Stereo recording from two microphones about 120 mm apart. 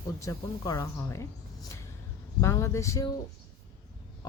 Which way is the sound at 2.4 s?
25° left (ahead or behind).